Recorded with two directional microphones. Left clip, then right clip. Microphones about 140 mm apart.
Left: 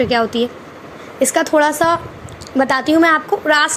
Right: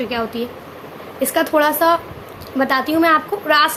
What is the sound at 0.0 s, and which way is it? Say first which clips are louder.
A woman's voice: left 7 dB; 50° left (ahead or behind).